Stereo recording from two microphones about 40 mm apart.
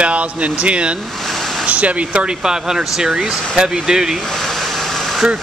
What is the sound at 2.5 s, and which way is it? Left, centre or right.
Speech, centre.